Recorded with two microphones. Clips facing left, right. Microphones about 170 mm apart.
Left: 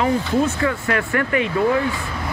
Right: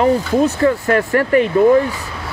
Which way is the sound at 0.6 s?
40° right (ahead or behind).